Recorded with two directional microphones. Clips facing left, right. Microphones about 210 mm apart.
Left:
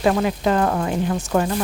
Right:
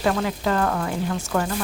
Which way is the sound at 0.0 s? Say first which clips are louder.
Left 4 dB; 20° left (ahead or behind).